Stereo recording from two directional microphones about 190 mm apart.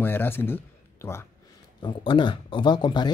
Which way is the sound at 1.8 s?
25° left (ahead or behind).